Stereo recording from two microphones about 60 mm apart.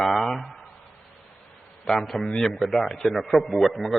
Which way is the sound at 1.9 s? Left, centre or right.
Centre.